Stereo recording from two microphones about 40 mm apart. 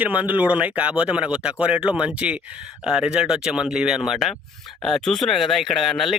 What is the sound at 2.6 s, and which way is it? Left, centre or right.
Speech, centre.